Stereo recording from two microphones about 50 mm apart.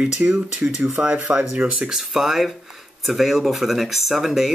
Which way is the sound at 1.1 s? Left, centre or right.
Right.